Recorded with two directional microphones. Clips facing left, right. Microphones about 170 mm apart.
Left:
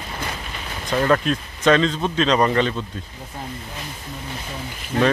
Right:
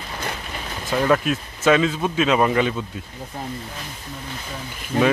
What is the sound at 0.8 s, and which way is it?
Speech, 5° right (ahead or behind).